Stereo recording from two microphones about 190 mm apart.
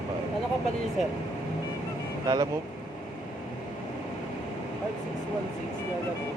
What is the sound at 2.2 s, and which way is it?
Speech, 20° right (ahead or behind).